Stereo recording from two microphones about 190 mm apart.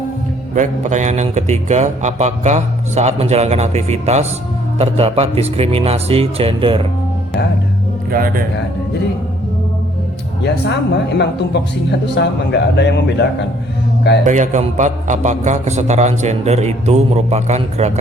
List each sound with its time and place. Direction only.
0.5 s a man's voice: 40° right (ahead or behind)
8.1 s a man's voice: 50° right (ahead or behind)
10.4 s speech: 65° left (ahead or behind)
14.3 s a man's voice: 40° right (ahead or behind)